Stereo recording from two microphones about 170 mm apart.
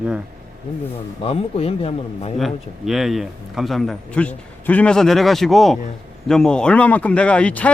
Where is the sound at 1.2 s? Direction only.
35° left (ahead or behind).